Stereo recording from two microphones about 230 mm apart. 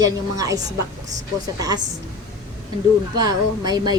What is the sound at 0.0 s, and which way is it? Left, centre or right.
Speech, centre.